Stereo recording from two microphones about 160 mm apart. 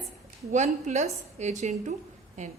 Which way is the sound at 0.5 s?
50° right (ahead or behind).